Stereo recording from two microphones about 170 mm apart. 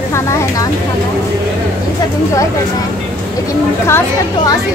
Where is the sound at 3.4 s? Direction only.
15° left (ahead or behind).